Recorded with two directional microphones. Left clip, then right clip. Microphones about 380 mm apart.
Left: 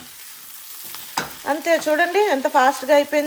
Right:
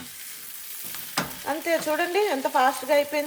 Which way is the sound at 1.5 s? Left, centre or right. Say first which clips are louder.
Left 7 dB; left.